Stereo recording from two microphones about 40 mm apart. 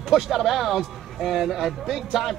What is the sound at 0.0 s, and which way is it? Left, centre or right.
Speech, centre.